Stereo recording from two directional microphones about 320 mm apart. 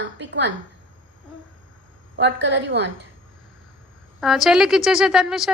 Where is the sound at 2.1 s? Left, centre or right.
Right.